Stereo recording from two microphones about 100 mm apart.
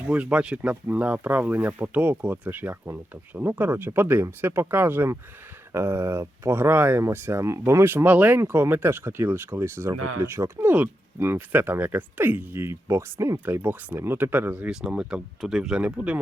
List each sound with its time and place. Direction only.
0.1 s speech: 15° right (ahead or behind); by 13.5 s 30° right (ahead or behind)
13.5 s speech: 20° right (ahead or behind)
14.7 s speech: 5° right (ahead or behind)